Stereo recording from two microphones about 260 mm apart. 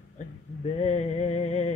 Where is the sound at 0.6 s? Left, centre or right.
Left.